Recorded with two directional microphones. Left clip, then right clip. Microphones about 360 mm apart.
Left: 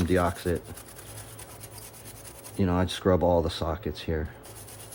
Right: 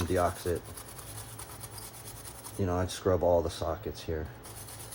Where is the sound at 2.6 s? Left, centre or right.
Left.